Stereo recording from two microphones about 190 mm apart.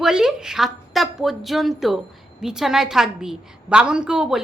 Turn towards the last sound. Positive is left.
turn(degrees=-5)  # may be behind; listen again after turning